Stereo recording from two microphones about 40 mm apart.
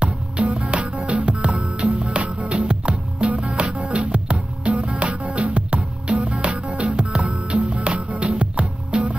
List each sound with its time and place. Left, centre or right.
0.0 s music: right